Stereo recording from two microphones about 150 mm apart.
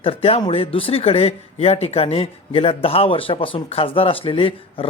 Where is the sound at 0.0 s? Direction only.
40° left (ahead or behind).